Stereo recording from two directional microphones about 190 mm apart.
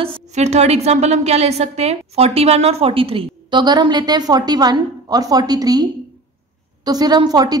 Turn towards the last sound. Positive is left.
turn(degrees=-20)  # may be behind; listen again after turning